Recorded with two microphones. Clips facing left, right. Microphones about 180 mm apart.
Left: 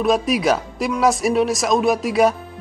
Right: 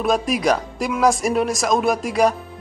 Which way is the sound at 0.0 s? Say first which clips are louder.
Left 2 dB; centre (ahead or behind).